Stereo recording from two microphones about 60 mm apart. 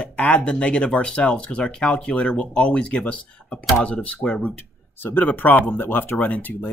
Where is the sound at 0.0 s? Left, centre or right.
Centre.